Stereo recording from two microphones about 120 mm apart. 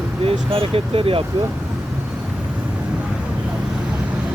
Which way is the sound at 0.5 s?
50° right (ahead or behind).